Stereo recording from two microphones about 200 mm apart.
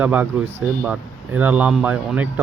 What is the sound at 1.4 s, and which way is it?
Speech, 5° right (ahead or behind).